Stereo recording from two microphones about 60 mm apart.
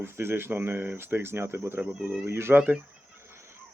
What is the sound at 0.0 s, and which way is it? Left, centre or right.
Speech, right.